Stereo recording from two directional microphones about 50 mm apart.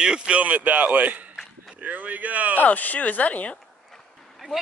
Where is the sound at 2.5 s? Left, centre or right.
Left.